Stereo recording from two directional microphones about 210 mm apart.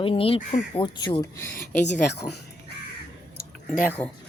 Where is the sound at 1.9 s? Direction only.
55° left (ahead or behind).